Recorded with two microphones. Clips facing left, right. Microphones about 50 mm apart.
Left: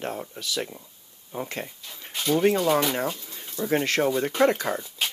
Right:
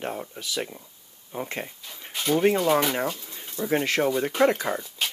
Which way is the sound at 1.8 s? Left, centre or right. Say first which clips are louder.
Left 1 dB; centre.